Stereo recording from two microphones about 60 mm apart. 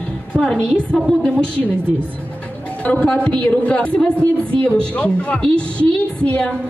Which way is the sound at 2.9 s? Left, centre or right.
Left.